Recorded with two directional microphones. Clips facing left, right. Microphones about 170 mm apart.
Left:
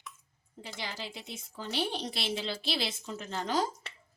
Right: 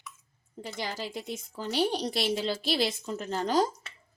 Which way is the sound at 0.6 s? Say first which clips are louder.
Right 5 dB; 45° right (ahead or behind).